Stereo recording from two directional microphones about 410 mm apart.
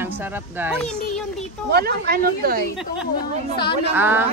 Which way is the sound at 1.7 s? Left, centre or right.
Right.